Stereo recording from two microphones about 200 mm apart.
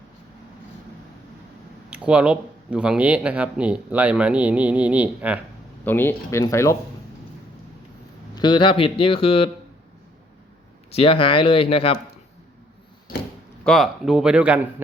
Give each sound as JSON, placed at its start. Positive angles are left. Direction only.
{"t": 1.9, "sound": "speech", "side_deg": -5}
{"t": 5.8, "sound": "speech", "side_deg": 10}
{"t": 8.4, "sound": "speech", "side_deg": 25}
{"t": 10.9, "sound": "speech", "side_deg": 25}
{"t": 13.7, "sound": "speech", "side_deg": 0}